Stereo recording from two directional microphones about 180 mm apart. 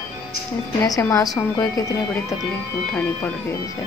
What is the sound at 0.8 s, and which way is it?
Speech, 20° left (ahead or behind).